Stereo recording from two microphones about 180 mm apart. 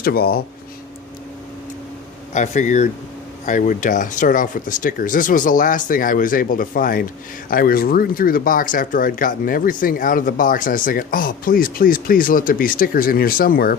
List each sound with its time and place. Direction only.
0.0 s speech: 55° left (ahead or behind)
2.3 s speech: 40° left (ahead or behind)